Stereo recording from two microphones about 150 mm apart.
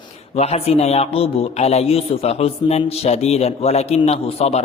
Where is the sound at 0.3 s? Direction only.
45° left (ahead or behind).